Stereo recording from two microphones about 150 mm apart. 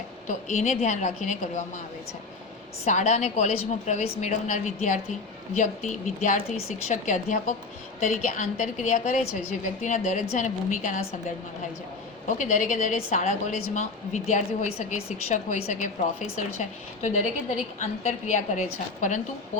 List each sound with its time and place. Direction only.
0.3 s a woman's voice: 55° left (ahead or behind)
2.8 s a woman's voice: 50° left (ahead or behind)
12.4 s a woman's voice: 55° left (ahead or behind)